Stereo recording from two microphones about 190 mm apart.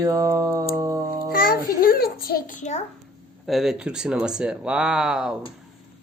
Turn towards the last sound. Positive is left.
turn(degrees=-5)  # may be behind; listen again after turning